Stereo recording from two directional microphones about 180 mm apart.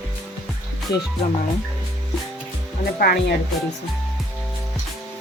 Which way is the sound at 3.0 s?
60° left (ahead or behind).